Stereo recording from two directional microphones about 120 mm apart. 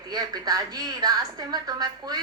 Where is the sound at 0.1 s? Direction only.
35° right (ahead or behind).